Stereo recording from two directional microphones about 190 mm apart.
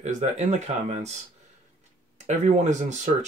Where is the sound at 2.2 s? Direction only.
40° right (ahead or behind).